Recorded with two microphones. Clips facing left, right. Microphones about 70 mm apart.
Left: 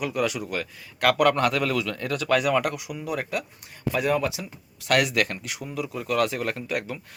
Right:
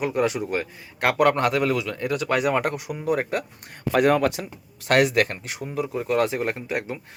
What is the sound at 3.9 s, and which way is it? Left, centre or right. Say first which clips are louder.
Speech: right 5 dB; right.